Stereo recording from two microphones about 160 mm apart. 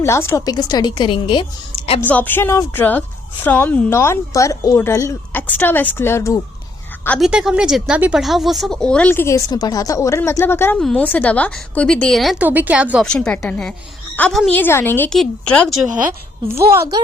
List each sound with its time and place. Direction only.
0.0 s a woman's voice: 15° left (ahead or behind)
2.0 s a woman's voice: 10° left (ahead or behind)
7.2 s a woman's voice: 5° right (ahead or behind)
12.5 s speech: 10° right (ahead or behind)
13.1 s a woman's voice: 5° left (ahead or behind)